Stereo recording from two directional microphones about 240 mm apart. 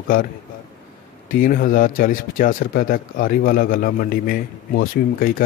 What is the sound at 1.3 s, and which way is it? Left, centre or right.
Speech, left.